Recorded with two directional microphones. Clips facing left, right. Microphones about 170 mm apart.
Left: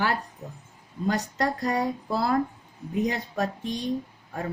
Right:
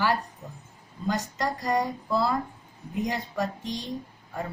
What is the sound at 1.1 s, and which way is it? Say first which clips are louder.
Speech: left 2 dB; 60° left (ahead or behind).